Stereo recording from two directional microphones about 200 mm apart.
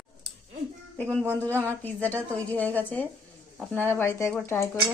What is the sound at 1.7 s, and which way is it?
Speech, 10° left (ahead or behind).